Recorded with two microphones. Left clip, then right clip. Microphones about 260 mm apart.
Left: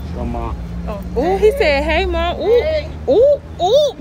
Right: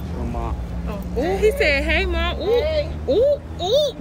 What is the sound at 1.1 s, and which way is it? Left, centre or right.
Speech, left.